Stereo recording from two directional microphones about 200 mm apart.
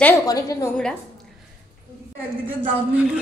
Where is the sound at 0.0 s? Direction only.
15° left (ahead or behind).